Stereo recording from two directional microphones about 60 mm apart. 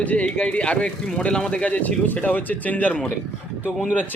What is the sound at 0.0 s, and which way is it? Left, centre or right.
Speech, left.